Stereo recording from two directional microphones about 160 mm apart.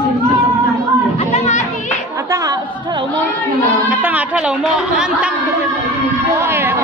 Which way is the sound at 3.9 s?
10° right (ahead or behind).